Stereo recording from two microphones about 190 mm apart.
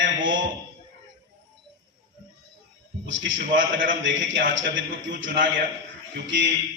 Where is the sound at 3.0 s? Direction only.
75° right (ahead or behind).